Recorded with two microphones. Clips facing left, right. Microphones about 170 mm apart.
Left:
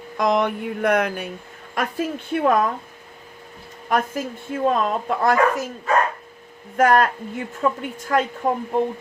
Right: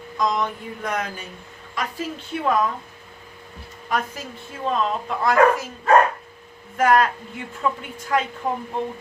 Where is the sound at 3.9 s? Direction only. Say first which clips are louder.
Left 4 dB; 50° left (ahead or behind).